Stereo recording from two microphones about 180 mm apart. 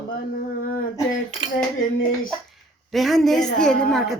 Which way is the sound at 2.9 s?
Centre (ahead or behind).